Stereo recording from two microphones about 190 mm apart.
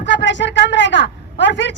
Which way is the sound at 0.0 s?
70° left (ahead or behind).